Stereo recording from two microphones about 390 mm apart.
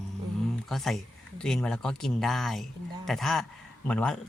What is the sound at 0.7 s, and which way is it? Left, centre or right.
Speech, centre.